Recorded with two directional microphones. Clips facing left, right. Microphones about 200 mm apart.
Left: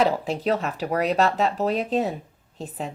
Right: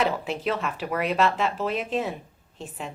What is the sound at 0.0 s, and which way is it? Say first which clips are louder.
Speech: left 3 dB; 35° left (ahead or behind).